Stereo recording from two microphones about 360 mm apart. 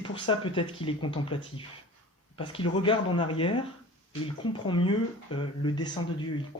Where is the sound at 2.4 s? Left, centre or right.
Centre.